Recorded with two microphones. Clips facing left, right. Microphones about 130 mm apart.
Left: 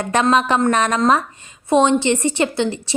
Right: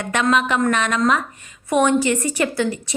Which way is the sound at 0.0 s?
35° left (ahead or behind).